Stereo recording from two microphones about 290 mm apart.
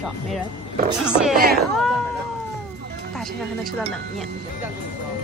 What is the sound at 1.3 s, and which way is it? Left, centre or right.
Speech, right.